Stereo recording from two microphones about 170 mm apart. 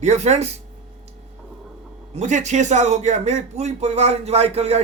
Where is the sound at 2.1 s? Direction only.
45° right (ahead or behind).